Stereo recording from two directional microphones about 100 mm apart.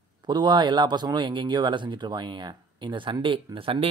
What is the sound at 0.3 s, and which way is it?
Speech, 50° right (ahead or behind).